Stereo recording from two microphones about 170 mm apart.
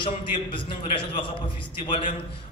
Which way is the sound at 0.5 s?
30° left (ahead or behind).